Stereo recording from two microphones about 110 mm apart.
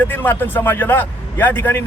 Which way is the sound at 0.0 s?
20° left (ahead or behind).